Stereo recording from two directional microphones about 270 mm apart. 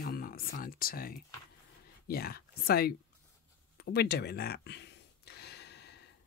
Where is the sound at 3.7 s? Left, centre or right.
Left.